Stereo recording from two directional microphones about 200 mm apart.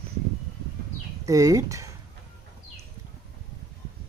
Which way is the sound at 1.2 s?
15° right (ahead or behind).